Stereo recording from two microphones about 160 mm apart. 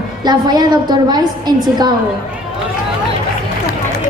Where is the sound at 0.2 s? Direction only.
25° right (ahead or behind).